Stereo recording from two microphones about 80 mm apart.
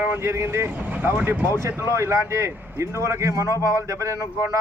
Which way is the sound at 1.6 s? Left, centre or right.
Right.